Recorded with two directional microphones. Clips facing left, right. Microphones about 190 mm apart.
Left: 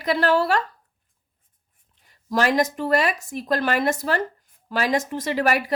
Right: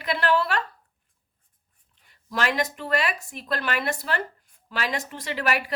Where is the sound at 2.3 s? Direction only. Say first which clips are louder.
Left 6 dB; 40° left (ahead or behind).